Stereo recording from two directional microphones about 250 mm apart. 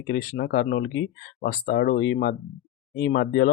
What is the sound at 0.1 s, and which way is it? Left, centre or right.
Speech, left.